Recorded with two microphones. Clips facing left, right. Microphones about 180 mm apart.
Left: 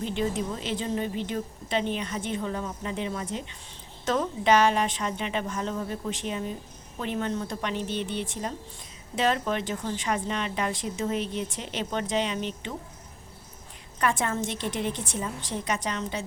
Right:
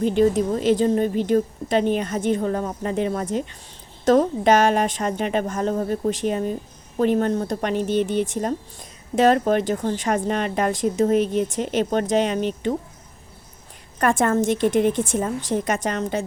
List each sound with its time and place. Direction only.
0.0 s a woman's voice: 45° right (ahead or behind)
14.0 s a woman's voice: 50° right (ahead or behind)